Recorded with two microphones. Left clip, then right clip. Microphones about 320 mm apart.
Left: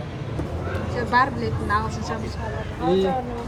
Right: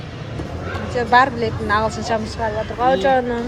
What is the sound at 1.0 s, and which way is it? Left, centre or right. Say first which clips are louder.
Speech: right 6 dB; centre.